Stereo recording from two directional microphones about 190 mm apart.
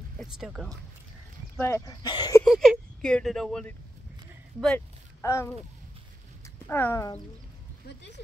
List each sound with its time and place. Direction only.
0.2 s speech: centre (ahead or behind)
1.6 s speech: 15° left (ahead or behind)
2.4 s speech: centre (ahead or behind)
5.2 s speech: 15° left (ahead or behind)
6.7 s speech: 15° left (ahead or behind)
7.8 s speech: 65° left (ahead or behind)